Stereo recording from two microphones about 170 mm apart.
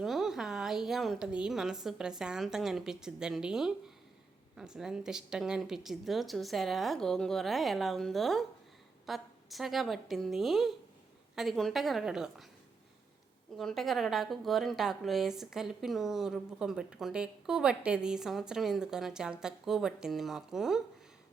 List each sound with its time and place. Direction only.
0.0 s a woman's voice: centre (ahead or behind)
13.6 s a woman's voice: centre (ahead or behind)